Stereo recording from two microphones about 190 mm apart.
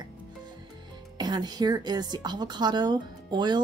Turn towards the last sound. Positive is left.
turn(degrees=-20)  # may be behind; listen again after turning